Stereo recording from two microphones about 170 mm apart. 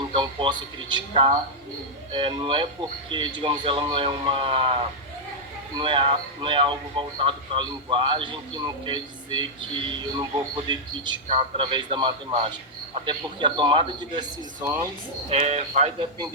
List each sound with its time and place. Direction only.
0.1 s a man's voice: 30° right (ahead or behind)
15.3 s a man's voice: 40° right (ahead or behind)